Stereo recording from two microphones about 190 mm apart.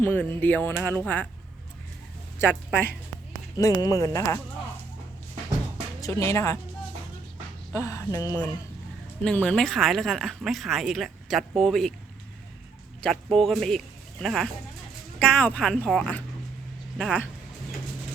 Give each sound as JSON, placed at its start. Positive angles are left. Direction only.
{"t": 0.0, "sound": "speech", "side_deg": 10}
{"t": 2.4, "sound": "speech", "side_deg": 10}
{"t": 6.0, "sound": "speech", "side_deg": 15}
{"t": 7.7, "sound": "speech", "side_deg": 15}
{"t": 13.0, "sound": "speech", "side_deg": 5}